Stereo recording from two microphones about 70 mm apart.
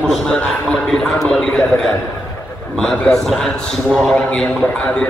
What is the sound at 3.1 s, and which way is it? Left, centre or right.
A man's voice, centre.